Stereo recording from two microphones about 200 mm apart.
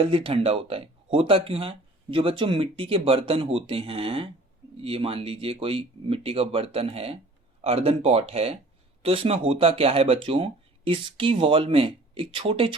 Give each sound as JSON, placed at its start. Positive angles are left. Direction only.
{"t": 0.1, "sound": "speech", "side_deg": -25}